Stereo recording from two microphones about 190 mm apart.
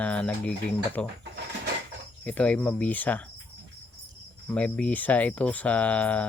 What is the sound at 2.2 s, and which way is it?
Speech, 5° left (ahead or behind).